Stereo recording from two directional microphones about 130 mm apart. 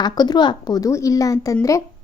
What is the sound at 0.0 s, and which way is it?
Speech, 35° left (ahead or behind).